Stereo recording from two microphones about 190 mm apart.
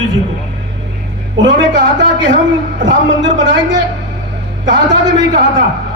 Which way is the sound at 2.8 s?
75° right (ahead or behind).